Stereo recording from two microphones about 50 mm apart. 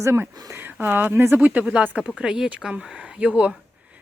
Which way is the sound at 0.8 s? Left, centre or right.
Right.